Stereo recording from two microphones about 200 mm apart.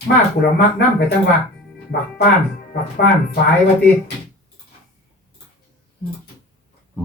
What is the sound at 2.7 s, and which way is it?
Speech, 55° left (ahead or behind).